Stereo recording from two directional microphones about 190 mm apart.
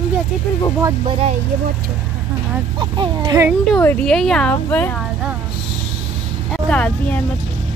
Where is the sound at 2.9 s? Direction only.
25° right (ahead or behind).